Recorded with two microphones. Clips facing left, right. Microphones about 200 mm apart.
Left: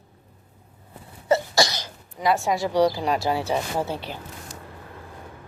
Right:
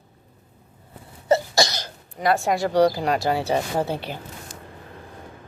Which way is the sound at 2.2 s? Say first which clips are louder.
Right 1 dB; 55° right (ahead or behind).